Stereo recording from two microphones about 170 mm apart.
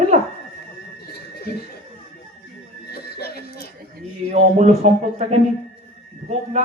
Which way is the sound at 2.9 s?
70° left (ahead or behind).